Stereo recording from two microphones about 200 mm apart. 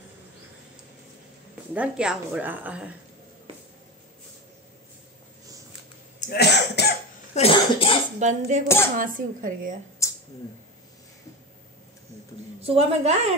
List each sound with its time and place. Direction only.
1.7 s a woman's voice: 5° right (ahead or behind)
6.3 s cough: 55° left (ahead or behind)
7.3 s speech: 30° left (ahead or behind)
8.2 s a woman's voice: 35° right (ahead or behind)
10.0 s a sound: 15° left (ahead or behind)
12.6 s a woman's voice: 30° right (ahead or behind)